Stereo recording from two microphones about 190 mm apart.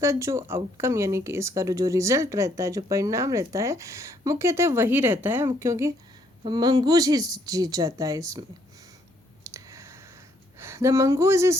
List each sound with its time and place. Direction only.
0.0 s a woman's voice: 15° right (ahead or behind)
9.4 s clicking: 15° right (ahead or behind)
10.6 s speech: 15° right (ahead or behind)